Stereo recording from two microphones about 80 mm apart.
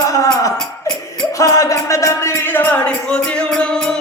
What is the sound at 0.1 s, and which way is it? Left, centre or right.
Music, left.